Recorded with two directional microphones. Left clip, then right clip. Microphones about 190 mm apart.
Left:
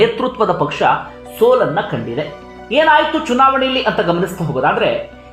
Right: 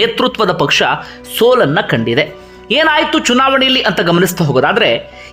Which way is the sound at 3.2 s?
30° right (ahead or behind).